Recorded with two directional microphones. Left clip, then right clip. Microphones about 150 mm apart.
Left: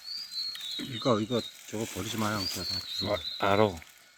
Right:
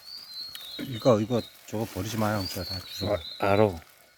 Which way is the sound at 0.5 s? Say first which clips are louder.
Left 1 dB; 90° right.